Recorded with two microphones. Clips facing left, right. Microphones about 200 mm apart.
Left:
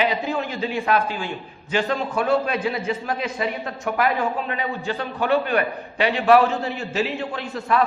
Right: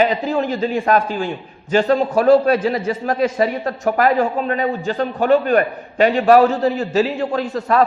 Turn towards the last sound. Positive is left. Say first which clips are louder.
# right 5 dB
turn(degrees=-40)  # may be behind; listen again after turning